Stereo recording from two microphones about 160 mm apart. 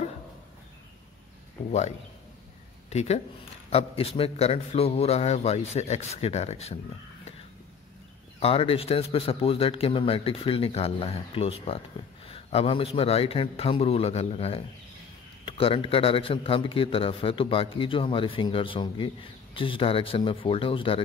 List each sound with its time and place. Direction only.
1.7 s a man's voice: 45° left (ahead or behind)
8.4 s a man's voice: 35° left (ahead or behind)